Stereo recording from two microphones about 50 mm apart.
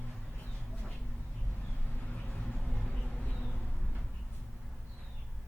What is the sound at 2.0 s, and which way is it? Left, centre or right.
Vehicle, left.